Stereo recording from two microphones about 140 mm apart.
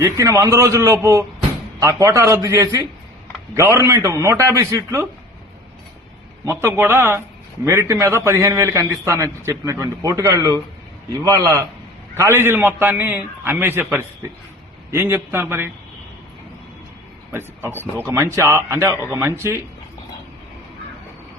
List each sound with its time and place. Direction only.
0.0 s a man's voice: 20° right (ahead or behind)
6.4 s a man's voice: 15° right (ahead or behind)
17.3 s a man's voice: 15° right (ahead or behind)